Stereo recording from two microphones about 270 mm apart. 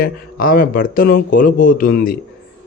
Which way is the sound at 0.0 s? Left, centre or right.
Left.